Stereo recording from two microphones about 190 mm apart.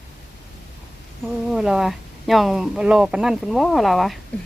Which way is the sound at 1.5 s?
Centre (ahead or behind).